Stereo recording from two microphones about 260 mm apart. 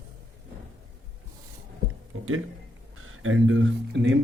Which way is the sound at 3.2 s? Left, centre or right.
Right.